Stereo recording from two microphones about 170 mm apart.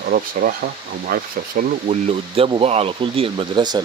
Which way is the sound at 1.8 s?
35° right (ahead or behind).